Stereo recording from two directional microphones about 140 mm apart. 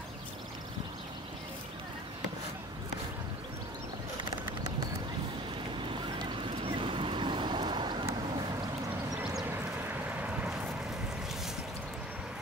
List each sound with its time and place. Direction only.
5.8 s boat: 35° right (ahead or behind)